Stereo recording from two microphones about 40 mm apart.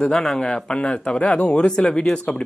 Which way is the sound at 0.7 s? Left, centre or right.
Left.